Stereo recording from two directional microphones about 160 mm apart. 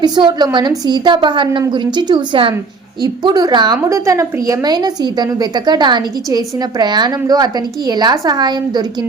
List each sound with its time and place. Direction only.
0.0 s a woman's voice: 25° right (ahead or behind)